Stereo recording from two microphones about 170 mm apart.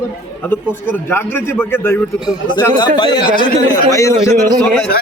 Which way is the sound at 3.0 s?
25° left (ahead or behind).